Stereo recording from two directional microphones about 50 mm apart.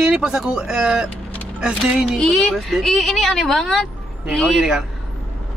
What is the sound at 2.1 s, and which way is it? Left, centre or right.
A woman's voice, centre.